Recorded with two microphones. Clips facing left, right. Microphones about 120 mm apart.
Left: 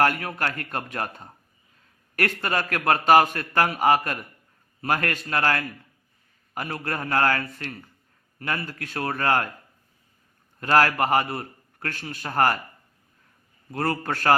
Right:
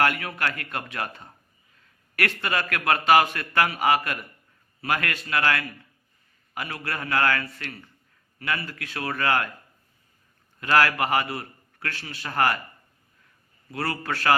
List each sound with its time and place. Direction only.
0.0 s a man's voice: 40° left (ahead or behind)
10.6 s a man's voice: 40° left (ahead or behind)
13.7 s a man's voice: 40° left (ahead or behind)